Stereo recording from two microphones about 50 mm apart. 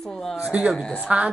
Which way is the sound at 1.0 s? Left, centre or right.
Right.